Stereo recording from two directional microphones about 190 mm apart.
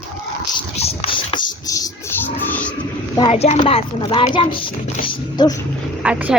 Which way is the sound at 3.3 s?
35° left (ahead or behind).